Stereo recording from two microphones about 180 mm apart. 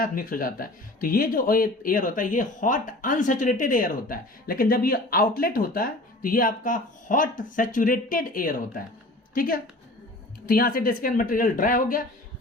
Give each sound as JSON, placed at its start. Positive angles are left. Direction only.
{"t": 0.0, "sound": "a woman's voice", "side_deg": 50}